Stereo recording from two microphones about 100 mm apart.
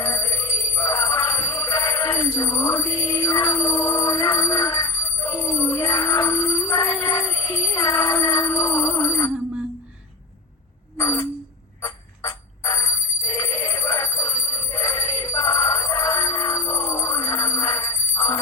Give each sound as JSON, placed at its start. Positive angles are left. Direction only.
{"t": 0.0, "sound": "jingle bell", "side_deg": 25}
{"t": 10.9, "sound": "a sound", "side_deg": 30}
{"t": 11.8, "sound": "bicycle bell", "side_deg": 30}